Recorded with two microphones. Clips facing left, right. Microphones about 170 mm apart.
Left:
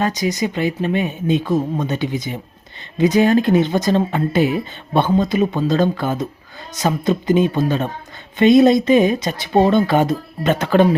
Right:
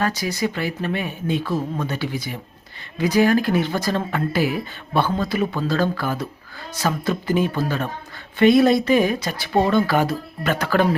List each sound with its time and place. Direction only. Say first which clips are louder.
0.0 s speech: left 3 dB; 20° left (ahead or behind)